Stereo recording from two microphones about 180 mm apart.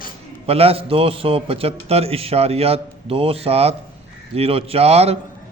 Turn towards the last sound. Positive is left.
turn(degrees=-35)  # may be behind; listen again after turning